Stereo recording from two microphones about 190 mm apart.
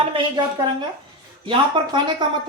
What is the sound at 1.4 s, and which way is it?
Speech, 25° right (ahead or behind).